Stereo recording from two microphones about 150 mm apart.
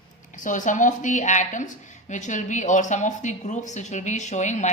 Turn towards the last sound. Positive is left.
turn(degrees=50)  # may be behind; listen again after turning